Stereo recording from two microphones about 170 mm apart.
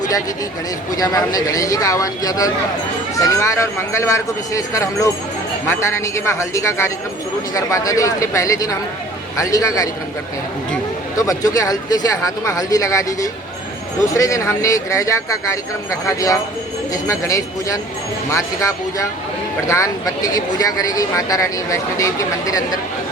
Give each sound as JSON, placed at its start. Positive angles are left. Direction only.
{"t": 0.9, "sound": "speech", "side_deg": 20}
{"t": 11.2, "sound": "speech", "side_deg": 20}